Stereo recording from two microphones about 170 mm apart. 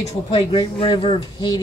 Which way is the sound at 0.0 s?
35° left (ahead or behind).